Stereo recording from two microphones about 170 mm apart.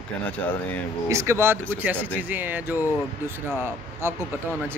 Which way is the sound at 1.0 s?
15° right (ahead or behind).